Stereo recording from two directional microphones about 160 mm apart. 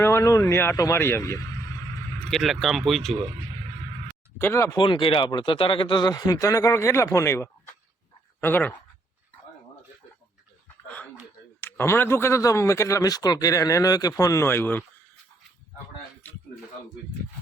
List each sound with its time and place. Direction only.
0.0 s speech: 15° left (ahead or behind)
2.3 s speech: centre (ahead or behind)
4.4 s speech: 15° left (ahead or behind)
4.8 s speech: 30° left (ahead or behind); by 8.7 s 10° left (ahead or behind)
10.8 s a sound: 10° left (ahead or behind)
11.6 s speech: 15° left (ahead or behind)